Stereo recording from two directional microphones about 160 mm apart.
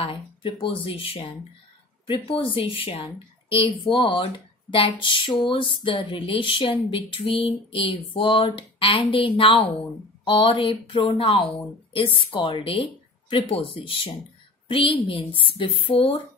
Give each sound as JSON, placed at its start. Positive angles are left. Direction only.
{"t": 0.0, "sound": "speech", "side_deg": 35}